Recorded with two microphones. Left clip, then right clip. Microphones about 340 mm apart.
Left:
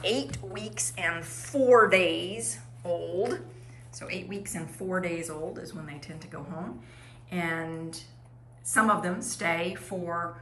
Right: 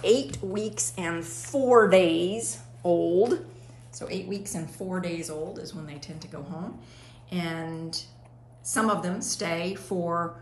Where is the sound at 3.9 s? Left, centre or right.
Centre.